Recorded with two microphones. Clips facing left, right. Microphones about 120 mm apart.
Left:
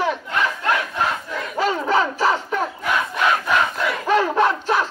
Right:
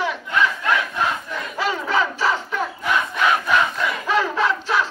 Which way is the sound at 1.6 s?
40° left (ahead or behind).